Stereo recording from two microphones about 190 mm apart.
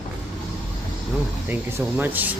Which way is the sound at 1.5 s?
10° right (ahead or behind).